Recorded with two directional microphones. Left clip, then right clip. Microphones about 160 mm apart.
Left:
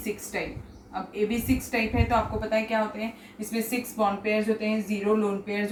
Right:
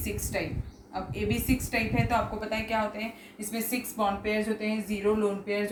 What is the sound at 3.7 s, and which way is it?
A woman's voice, 25° right (ahead or behind).